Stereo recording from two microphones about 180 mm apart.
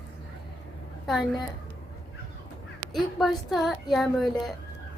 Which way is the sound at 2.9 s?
Centre (ahead or behind).